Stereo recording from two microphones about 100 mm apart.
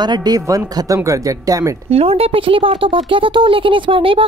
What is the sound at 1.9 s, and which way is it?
Speech, 80° right.